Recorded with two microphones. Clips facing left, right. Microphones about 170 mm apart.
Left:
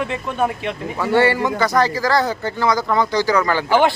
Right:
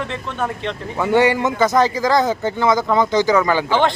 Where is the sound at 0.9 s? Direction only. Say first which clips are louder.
Right 1 dB; 15° right (ahead or behind).